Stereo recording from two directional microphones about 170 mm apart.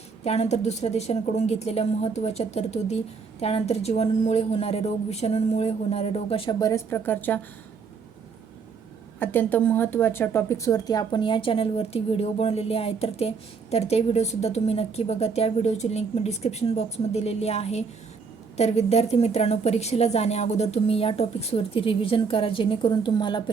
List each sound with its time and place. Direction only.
0.3 s speech: 40° left (ahead or behind); by 7.4 s 10° left (ahead or behind)
9.1 s speech: 10° left (ahead or behind)